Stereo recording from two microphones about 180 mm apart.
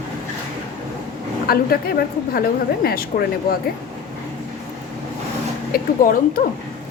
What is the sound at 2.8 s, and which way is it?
Speech, 55° left (ahead or behind).